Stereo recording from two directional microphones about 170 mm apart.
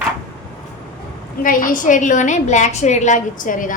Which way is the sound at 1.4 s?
50° left (ahead or behind).